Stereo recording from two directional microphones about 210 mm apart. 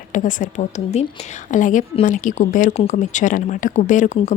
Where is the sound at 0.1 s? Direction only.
40° left (ahead or behind).